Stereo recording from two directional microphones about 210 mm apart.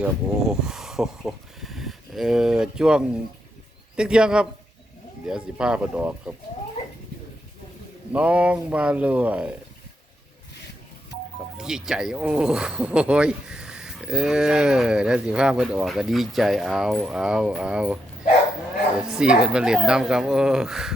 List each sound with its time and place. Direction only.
0.0 s a sound: 5° right (ahead or behind)
3.9 s speech: 5° right (ahead or behind)
8.1 s speech: 5° right (ahead or behind)
11.5 s speech: centre (ahead or behind)